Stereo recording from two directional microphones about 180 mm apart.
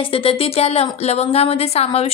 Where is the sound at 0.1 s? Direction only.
30° left (ahead or behind).